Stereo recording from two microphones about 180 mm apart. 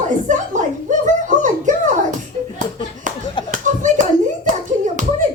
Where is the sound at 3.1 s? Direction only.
45° right (ahead or behind).